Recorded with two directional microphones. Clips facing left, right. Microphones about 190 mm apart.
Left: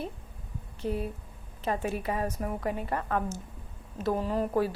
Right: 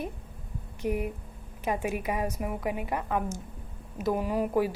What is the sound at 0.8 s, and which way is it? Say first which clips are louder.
Speech: right 2 dB; 15° right (ahead or behind).